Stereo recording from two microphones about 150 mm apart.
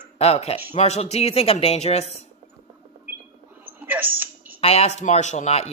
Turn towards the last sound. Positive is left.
turn(degrees=45)  # may be behind; listen again after turning